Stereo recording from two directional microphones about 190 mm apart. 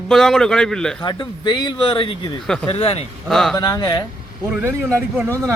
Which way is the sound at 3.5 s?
20° left (ahead or behind).